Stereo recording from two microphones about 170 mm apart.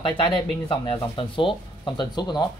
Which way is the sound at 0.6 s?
30° left (ahead or behind).